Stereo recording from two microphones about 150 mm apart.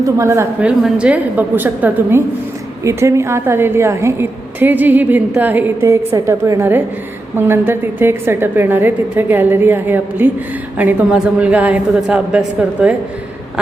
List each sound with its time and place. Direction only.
0.0 s a woman's voice: 20° right (ahead or behind)
0.6 s a woman's voice: 5° right (ahead or behind)